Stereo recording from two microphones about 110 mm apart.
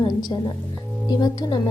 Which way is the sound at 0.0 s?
40° left (ahead or behind).